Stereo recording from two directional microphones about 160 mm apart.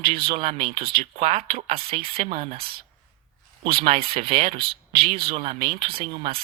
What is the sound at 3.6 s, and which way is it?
Speech, 35° right (ahead or behind).